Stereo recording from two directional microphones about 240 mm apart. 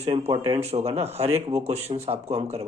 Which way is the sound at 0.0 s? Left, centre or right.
Right.